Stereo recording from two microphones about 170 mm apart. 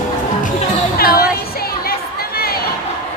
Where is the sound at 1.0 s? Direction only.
60° left (ahead or behind).